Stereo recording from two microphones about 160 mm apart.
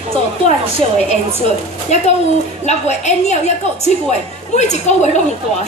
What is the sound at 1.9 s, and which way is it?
A woman's voice, 45° left (ahead or behind).